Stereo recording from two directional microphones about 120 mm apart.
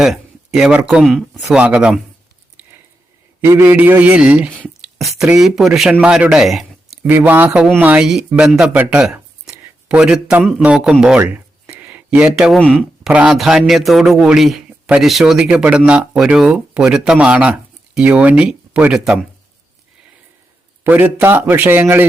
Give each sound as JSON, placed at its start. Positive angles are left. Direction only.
{"t": 0.0, "sound": "speech", "side_deg": -5}
{"t": 2.6, "sound": "a sound", "side_deg": -15}
{"t": 3.4, "sound": "speech", "side_deg": -15}
{"t": 7.1, "sound": "speech", "side_deg": -15}
{"t": 11.2, "sound": "a sound", "side_deg": -15}
{"t": 12.5, "sound": "speech", "side_deg": 10}
{"t": 13.1, "sound": "speech", "side_deg": -5}
{"t": 20.8, "sound": "speech", "side_deg": -15}